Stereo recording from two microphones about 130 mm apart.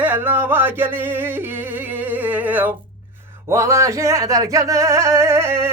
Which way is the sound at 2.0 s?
15° right (ahead or behind).